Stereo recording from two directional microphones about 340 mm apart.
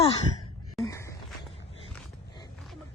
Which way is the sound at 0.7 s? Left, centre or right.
Centre.